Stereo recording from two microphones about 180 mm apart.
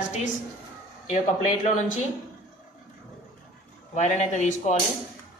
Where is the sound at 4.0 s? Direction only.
40° left (ahead or behind).